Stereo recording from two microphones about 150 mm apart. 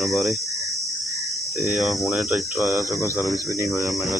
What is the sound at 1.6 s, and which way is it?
Speech, 5° right (ahead or behind).